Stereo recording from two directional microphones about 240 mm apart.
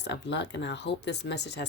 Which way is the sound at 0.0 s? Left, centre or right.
Left.